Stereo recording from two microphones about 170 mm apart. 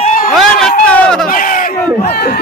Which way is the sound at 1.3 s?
50° left (ahead or behind).